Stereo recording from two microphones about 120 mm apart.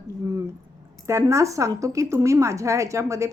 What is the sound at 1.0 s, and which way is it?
A woman's voice, 25° right (ahead or behind).